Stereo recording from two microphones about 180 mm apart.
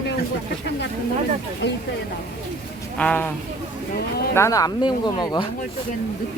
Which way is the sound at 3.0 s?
10° left (ahead or behind).